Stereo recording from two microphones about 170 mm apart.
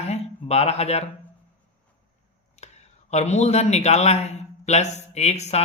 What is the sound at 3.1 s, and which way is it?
Speech, 40° left (ahead or behind).